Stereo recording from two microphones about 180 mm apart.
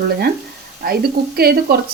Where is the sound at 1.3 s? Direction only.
60° right (ahead or behind).